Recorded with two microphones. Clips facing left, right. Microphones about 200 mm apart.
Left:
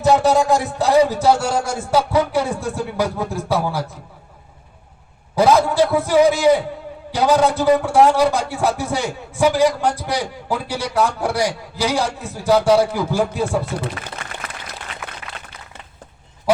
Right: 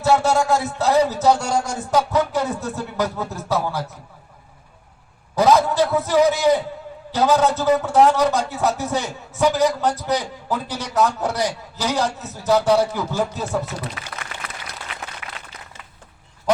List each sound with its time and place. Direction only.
0.0 s a man's voice: 15° left (ahead or behind)
5.3 s a man's voice: 10° left (ahead or behind)
15.2 s a sound: 35° left (ahead or behind)